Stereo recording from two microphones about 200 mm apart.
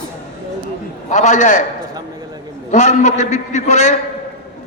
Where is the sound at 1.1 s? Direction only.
35° left (ahead or behind).